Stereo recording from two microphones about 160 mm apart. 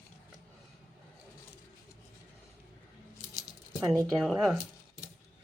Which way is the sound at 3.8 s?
20° right (ahead or behind).